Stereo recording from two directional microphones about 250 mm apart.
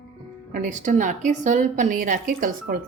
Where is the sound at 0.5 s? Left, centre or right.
Right.